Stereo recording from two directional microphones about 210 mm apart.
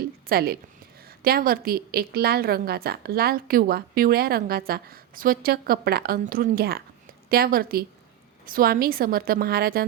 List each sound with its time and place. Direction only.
0.3 s a woman's voice: 45° right (ahead or behind)